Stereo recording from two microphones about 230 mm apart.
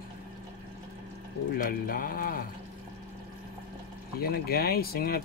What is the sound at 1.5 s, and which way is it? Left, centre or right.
Speech, left.